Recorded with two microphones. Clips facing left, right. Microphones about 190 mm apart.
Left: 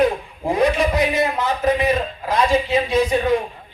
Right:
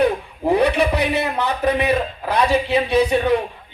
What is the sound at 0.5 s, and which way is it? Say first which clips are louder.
A man's voice: even; 65° right (ahead or behind).